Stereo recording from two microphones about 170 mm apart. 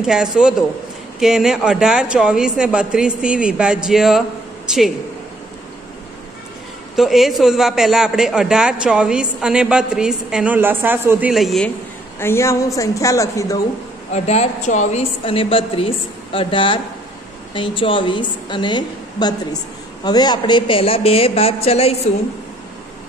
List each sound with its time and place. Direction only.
0.0 s a man's voice: 5° right (ahead or behind)
7.0 s a man's voice: centre (ahead or behind)
12.2 s a woman's voice: 15° left (ahead or behind)
14.1 s a woman's voice: 40° left (ahead or behind)